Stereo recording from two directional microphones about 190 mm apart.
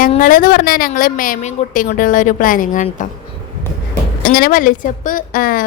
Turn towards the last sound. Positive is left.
turn(degrees=45)  # may be behind; listen again after turning